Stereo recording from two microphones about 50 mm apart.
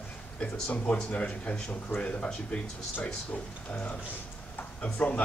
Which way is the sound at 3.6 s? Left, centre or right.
Left.